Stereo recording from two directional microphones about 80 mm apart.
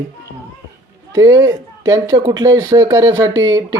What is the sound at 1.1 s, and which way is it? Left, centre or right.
Speech, right.